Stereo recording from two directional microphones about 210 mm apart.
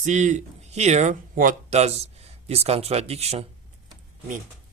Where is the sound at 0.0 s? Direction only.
35° right (ahead or behind).